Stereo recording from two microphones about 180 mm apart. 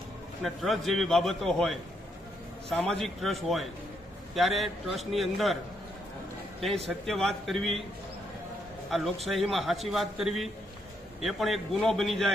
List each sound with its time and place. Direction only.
0.4 s a man's voice: centre (ahead or behind)
6.6 s a man's voice: centre (ahead or behind)
8.9 s a man's voice: centre (ahead or behind)